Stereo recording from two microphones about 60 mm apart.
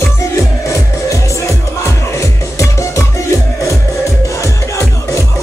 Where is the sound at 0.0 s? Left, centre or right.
Left.